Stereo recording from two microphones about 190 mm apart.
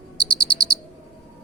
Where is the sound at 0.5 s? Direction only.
20° right (ahead or behind).